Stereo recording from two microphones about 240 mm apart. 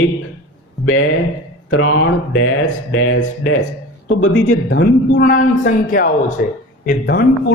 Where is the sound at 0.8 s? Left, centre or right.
Left.